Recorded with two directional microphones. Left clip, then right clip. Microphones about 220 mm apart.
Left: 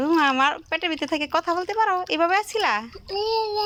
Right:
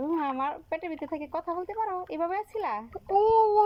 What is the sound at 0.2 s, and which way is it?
Speech, 55° left (ahead or behind).